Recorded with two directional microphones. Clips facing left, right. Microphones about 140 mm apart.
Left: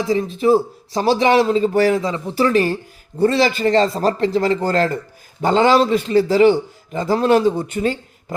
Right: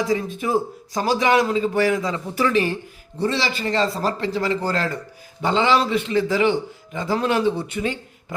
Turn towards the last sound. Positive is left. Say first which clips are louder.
# left 4 dB
turn(degrees=40)  # may be behind; listen again after turning